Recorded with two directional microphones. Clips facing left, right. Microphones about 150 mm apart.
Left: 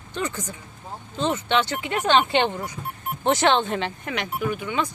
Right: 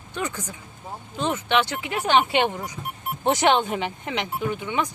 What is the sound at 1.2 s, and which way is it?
Speech, 10° right (ahead or behind).